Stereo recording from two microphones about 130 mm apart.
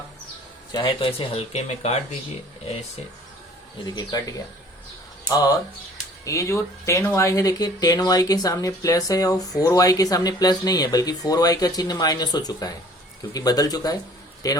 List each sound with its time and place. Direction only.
0.7 s speech: 35° left (ahead or behind); by 2.0 s 55° left (ahead or behind)
3.8 s speech: 30° left (ahead or behind)
6.2 s speech: 25° left (ahead or behind)